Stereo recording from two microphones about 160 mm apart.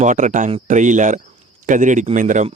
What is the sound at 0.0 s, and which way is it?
A man's voice, 50° right (ahead or behind).